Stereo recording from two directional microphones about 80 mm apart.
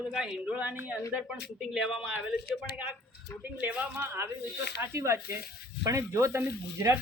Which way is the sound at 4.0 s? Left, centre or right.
Right.